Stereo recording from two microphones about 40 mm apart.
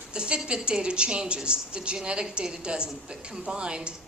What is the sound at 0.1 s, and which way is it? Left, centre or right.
A woman's voice, right.